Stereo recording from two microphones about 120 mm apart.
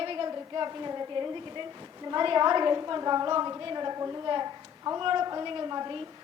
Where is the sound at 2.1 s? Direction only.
40° right (ahead or behind).